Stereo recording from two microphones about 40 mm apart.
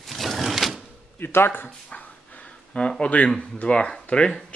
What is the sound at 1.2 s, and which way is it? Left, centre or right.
Speech, left.